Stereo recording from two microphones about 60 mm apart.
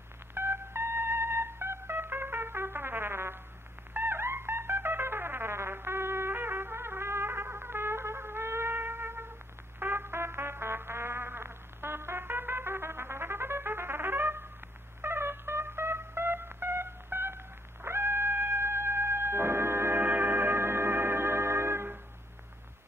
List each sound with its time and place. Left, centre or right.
0.3 s music: right